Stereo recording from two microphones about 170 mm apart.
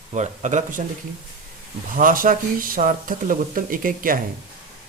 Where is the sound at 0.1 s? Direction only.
45° right (ahead or behind).